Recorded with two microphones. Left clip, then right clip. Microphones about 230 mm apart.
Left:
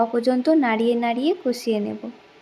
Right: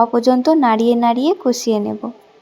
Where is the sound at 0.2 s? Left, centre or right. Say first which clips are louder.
Right 6 dB; centre.